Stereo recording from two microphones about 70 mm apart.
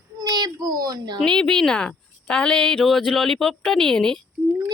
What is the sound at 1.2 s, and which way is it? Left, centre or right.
A woman's voice, centre.